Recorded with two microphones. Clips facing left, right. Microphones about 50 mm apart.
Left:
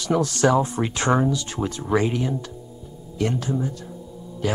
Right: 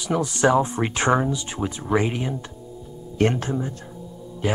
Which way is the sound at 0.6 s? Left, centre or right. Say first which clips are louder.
Right 1 dB; right.